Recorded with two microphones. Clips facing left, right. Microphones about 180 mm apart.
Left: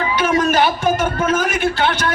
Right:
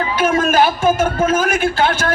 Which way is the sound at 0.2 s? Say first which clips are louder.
Right 2 dB; 45° right (ahead or behind).